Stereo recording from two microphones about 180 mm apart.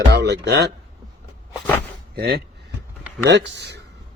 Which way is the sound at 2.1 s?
60° right (ahead or behind).